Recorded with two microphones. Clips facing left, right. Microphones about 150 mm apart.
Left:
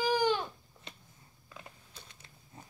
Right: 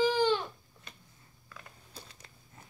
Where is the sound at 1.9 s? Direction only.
35° right (ahead or behind).